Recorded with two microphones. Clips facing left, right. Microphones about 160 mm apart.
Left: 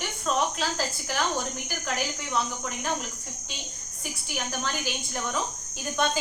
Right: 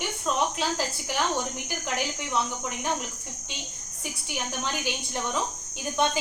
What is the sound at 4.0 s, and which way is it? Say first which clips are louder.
Speech: even; 20° right (ahead or behind).